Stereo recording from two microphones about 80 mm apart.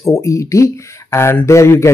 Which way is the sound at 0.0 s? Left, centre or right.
Left.